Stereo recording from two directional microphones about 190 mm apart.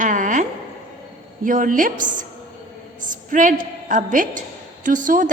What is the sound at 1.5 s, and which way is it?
A woman's voice, 45° right (ahead or behind).